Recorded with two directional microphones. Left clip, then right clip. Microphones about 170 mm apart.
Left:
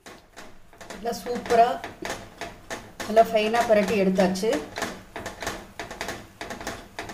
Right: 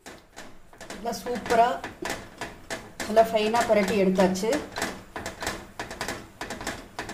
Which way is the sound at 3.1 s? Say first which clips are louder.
Left 1 dB; 5° left (ahead or behind).